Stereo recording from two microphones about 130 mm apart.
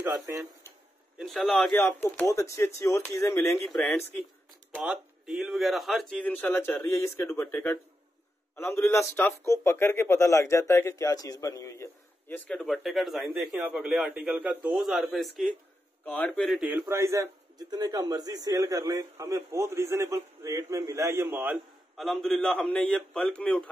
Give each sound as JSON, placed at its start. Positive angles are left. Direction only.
{"t": 0.0, "sound": "speech", "side_deg": -20}
{"t": 1.2, "sound": "a man's voice", "side_deg": 0}
{"t": 4.7, "sound": "a man's voice", "side_deg": -10}
{"t": 6.2, "sound": "speech", "side_deg": 15}
{"t": 12.4, "sound": "a man's voice", "side_deg": 5}
{"t": 14.8, "sound": "a man's voice", "side_deg": 0}
{"t": 16.1, "sound": "speech", "side_deg": 10}
{"t": 16.6, "sound": "a man's voice", "side_deg": -15}
{"t": 21.9, "sound": "a man's voice", "side_deg": 0}